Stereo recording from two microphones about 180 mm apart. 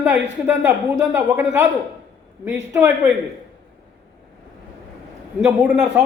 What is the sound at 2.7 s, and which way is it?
Speech, 15° right (ahead or behind).